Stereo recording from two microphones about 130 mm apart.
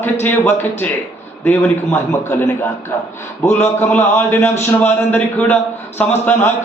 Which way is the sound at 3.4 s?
20° left (ahead or behind).